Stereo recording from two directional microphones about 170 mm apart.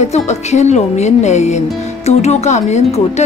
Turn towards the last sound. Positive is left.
turn(degrees=40)  # may be behind; listen again after turning